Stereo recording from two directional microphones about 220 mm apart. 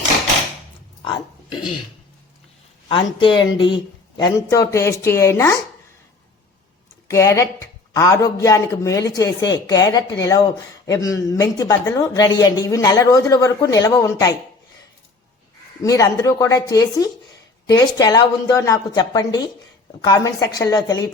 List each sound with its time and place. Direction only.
2.9 s a woman's voice: 20° left (ahead or behind)
7.1 s a woman's voice: 15° left (ahead or behind)
15.8 s a woman's voice: 15° left (ahead or behind)